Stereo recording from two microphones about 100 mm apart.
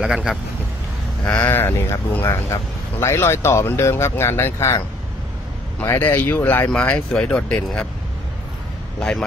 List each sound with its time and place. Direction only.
0.0 s speech: 5° right (ahead or behind)
1.2 s speech: 15° left (ahead or behind)